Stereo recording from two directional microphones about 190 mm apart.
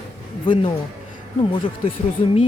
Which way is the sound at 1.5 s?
25° left (ahead or behind).